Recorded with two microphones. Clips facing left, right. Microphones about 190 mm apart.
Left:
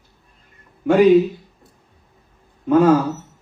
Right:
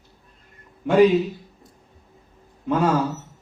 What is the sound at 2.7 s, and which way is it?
Speech, 50° left (ahead or behind).